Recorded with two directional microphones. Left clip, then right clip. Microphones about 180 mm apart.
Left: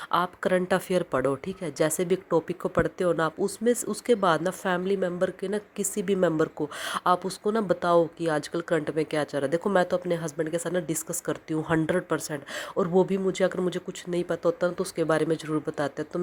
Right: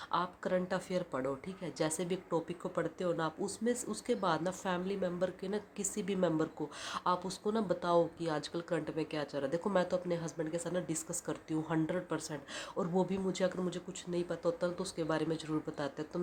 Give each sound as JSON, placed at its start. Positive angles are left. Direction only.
{"t": 0.1, "sound": "speech", "side_deg": 40}